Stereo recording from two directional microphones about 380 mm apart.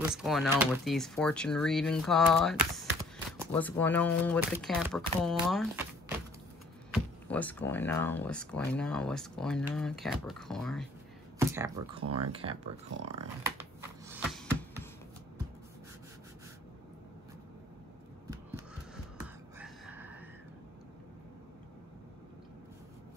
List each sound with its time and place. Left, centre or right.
0.1 s speech: centre
6.9 s speech: centre
12.0 s speech: right
12.3 s speech: centre
12.9 s speech: right
13.6 s a sound: centre
19.1 s gasp: centre